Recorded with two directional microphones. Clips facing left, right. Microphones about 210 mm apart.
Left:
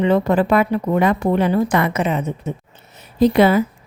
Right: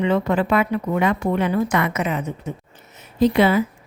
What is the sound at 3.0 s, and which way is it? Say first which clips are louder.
Speech: left 3 dB; 40° left (ahead or behind).